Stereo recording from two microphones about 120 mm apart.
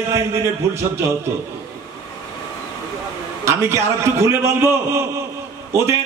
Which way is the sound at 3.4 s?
20° right (ahead or behind).